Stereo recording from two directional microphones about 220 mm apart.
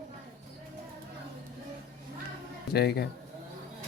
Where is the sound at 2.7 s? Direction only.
45° left (ahead or behind).